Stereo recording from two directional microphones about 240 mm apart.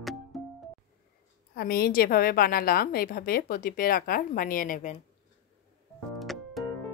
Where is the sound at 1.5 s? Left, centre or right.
Left.